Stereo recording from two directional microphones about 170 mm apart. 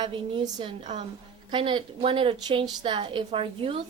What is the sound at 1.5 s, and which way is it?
A woman's voice, 30° right (ahead or behind).